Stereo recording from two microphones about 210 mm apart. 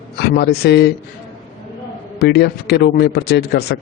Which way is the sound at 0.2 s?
50° left (ahead or behind).